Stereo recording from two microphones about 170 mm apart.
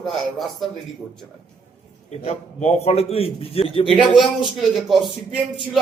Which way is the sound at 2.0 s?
40° left (ahead or behind).